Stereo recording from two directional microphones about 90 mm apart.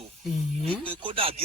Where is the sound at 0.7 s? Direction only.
70° right (ahead or behind).